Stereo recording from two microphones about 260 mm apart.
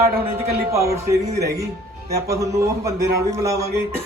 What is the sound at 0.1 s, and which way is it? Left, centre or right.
Speech, right.